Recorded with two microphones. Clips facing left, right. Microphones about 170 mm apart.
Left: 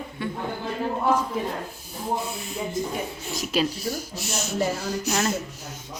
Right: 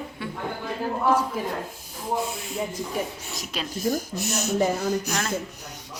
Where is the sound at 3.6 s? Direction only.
45° right (ahead or behind).